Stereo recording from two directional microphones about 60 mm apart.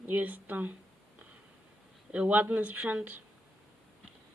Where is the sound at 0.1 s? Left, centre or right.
Right.